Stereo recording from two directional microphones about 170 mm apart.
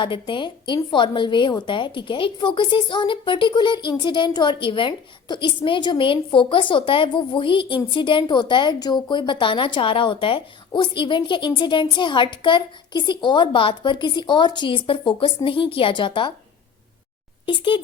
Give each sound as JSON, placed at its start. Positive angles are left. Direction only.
{"t": 0.0, "sound": "a woman's voice", "side_deg": 30}
{"t": 17.4, "sound": "speech", "side_deg": 30}